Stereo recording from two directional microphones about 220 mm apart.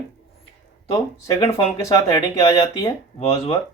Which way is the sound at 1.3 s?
20° left (ahead or behind).